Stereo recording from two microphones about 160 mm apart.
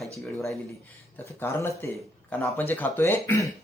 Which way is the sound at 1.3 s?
15° left (ahead or behind).